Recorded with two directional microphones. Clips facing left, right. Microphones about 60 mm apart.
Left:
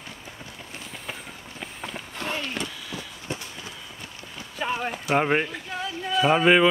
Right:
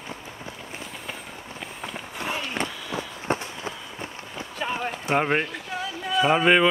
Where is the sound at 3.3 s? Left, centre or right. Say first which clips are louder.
Right 8 dB; right.